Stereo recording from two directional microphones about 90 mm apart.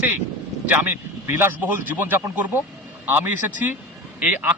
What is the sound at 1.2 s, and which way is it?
Speech, 20° right (ahead or behind).